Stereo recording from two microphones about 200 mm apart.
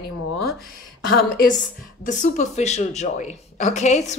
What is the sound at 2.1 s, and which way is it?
A woman's voice, 40° left (ahead or behind).